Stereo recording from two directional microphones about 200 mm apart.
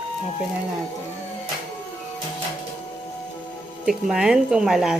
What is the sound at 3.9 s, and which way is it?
A woman's voice, 5° right (ahead or behind).